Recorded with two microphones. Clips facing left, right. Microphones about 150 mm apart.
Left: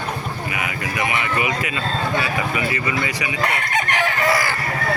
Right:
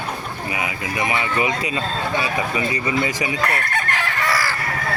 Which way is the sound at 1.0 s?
25° right (ahead or behind).